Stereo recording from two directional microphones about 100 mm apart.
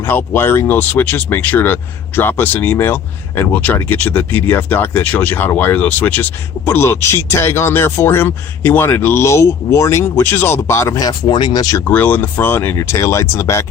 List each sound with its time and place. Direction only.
0.0 s speech: 20° left (ahead or behind); by 11.8 s 40° left (ahead or behind)
11.9 s speech: 20° left (ahead or behind)